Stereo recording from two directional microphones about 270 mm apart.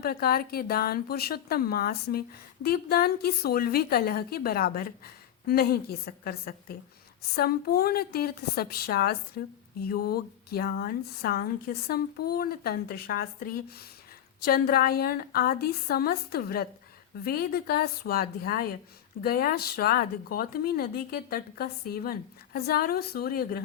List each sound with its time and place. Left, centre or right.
0.0 s speech: left